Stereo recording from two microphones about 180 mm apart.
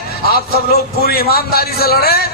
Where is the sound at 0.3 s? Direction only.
60° left (ahead or behind).